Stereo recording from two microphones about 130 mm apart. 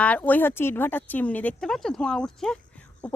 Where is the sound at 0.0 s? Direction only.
10° left (ahead or behind).